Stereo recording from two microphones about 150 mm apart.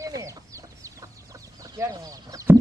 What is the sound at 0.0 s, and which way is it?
Chicken, 20° right (ahead or behind).